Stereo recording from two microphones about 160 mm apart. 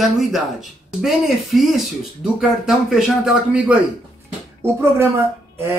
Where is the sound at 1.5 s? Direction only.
Centre (ahead or behind).